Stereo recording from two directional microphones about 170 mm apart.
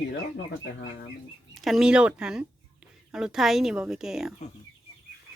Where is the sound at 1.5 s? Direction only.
Centre (ahead or behind).